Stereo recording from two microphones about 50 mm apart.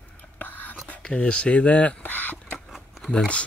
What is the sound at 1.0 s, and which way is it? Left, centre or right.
Speech, left.